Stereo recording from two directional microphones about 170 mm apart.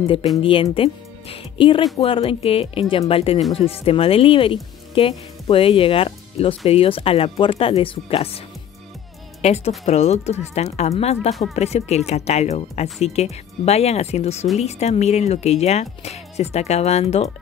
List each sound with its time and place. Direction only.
0.0 s speech: 30° left (ahead or behind)
9.4 s speech: 40° left (ahead or behind)